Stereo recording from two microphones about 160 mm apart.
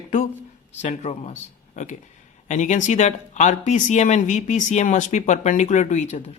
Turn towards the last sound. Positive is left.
turn(degrees=45)  # may be behind; listen again after turning